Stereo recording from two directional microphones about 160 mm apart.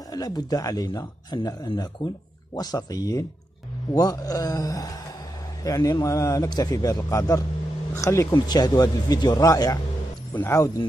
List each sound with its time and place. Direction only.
0.1 s speech: 25° left (ahead or behind)